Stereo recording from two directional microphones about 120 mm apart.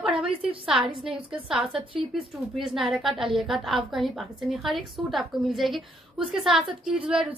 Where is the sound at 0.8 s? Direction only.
45° right (ahead or behind).